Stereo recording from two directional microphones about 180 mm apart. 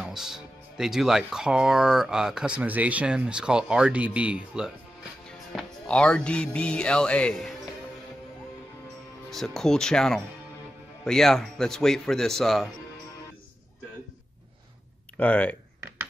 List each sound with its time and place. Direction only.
0.0 s speech: 5° right (ahead or behind)
9.3 s speech: centre (ahead or behind)
15.1 s speech: 5° left (ahead or behind)